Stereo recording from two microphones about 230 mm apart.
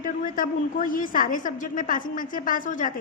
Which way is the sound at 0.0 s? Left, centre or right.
Left.